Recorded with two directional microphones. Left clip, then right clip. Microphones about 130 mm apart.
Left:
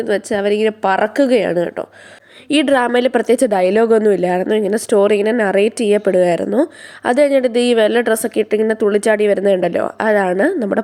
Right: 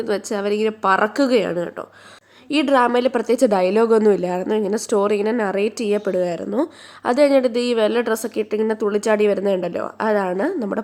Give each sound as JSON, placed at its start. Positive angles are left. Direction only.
{"t": 0.0, "sound": "a woman's voice", "side_deg": 15}
{"t": 6.6, "sound": "a woman's voice", "side_deg": 25}